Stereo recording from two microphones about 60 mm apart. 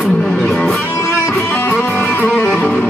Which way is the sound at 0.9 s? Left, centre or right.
Left.